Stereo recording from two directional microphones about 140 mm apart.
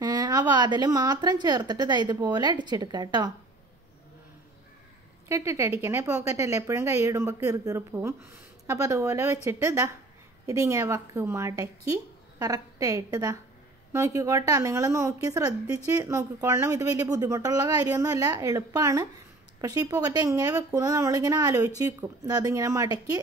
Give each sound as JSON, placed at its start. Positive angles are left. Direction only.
{"t": 0.0, "sound": "a woman's voice", "side_deg": -30}
{"t": 5.3, "sound": "a woman's voice", "side_deg": -20}